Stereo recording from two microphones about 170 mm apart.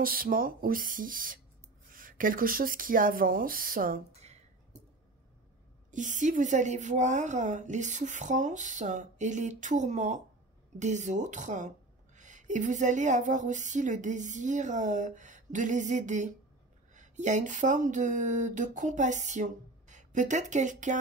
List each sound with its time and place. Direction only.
0.0 s speech: 60° right (ahead or behind)
4.1 s a sound: 40° right (ahead or behind)
5.9 s a woman's voice: 50° right (ahead or behind)